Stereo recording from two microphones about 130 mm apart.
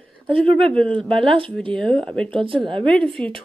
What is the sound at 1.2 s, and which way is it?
Speech, 45° right (ahead or behind).